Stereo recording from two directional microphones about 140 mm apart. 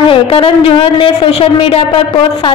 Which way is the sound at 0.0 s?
40° left (ahead or behind).